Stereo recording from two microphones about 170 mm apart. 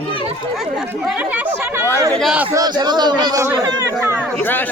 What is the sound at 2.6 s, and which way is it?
Speech, 25° right (ahead or behind).